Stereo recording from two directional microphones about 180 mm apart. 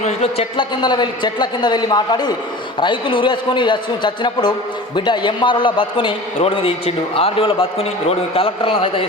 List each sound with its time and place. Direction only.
0.0 s a man's voice: 35° left (ahead or behind)